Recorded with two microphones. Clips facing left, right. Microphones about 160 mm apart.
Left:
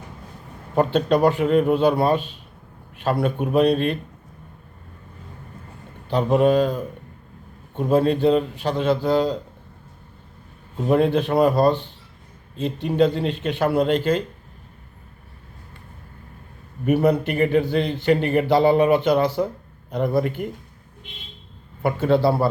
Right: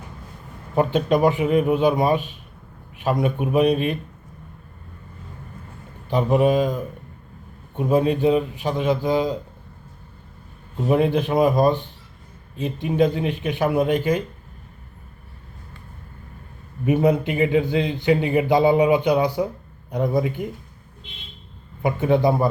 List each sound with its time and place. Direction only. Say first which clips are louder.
0.8 s a man's voice: even; 5° right (ahead or behind)
6.1 s a man's voice: left 1 dB; 10° right (ahead or behind)
10.8 s a man's voice: left 1 dB; 5° right (ahead or behind)
16.8 s a man's voice: even; 15° right (ahead or behind)
21.8 s a man's voice: even; 15° right (ahead or behind)